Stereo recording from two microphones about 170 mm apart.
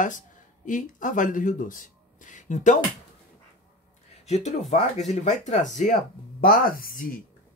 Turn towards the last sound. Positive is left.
turn(degrees=55)  # may be behind; listen again after turning